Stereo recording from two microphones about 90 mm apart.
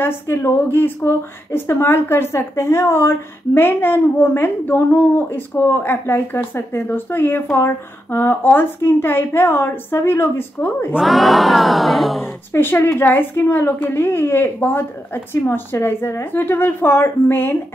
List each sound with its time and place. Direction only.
0.0 s speech: 25° left (ahead or behind)
11.0 s a sound: centre (ahead or behind)
12.2 s speech: 25° left (ahead or behind)